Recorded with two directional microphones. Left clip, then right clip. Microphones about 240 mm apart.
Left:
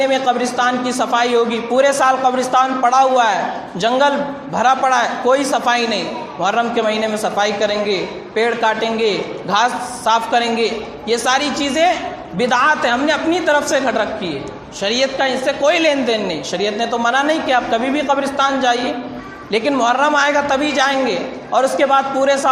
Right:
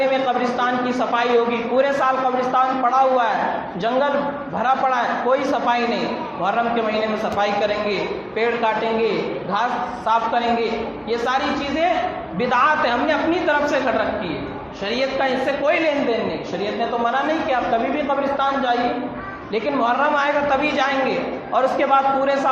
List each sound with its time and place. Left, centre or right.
0.1 s a man's voice: left
7.3 s a man's voice: left